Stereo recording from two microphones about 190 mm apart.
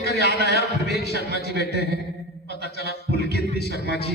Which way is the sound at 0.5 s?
55° left (ahead or behind).